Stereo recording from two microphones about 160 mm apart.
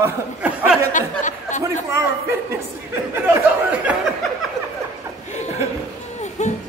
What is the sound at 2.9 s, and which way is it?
A man's voice, 15° right (ahead or behind).